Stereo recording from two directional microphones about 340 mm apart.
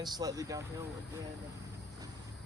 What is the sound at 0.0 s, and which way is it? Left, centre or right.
Speech, centre.